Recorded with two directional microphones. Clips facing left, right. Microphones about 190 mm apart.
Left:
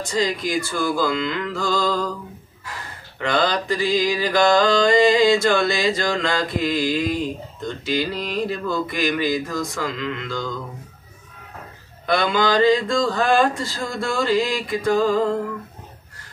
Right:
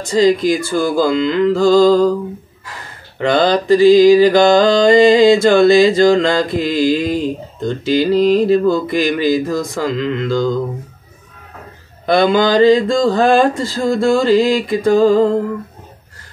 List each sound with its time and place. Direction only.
0.1 s mantra: 30° right (ahead or behind)
3.2 s mantra: 30° right (ahead or behind)
12.1 s mantra: 30° right (ahead or behind)